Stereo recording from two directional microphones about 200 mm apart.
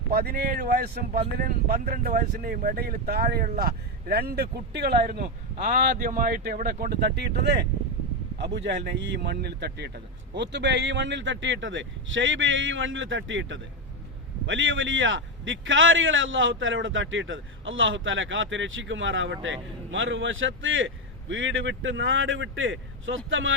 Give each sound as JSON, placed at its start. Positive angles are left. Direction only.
{"t": 0.1, "sound": "a man's voice", "side_deg": -50}